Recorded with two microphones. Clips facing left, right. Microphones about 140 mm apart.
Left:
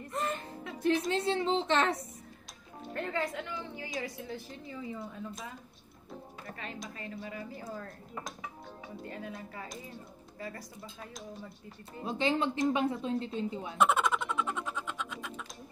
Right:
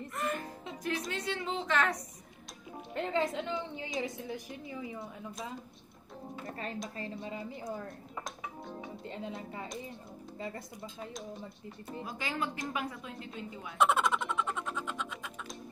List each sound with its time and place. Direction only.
0.1 s music: 25° left (ahead or behind)
0.8 s a woman's voice: 30° left (ahead or behind)
2.9 s a woman's voice: 20° right (ahead or behind)
7.0 s a woman's voice: 25° right (ahead or behind)
9.0 s a woman's voice: 20° right (ahead or behind)
12.0 s a woman's voice: 25° left (ahead or behind)
13.7 s a sound: centre (ahead or behind)